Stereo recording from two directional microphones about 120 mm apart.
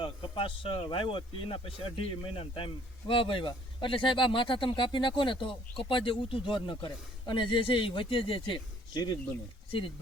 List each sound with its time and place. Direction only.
0.0 s speech: 50° left (ahead or behind)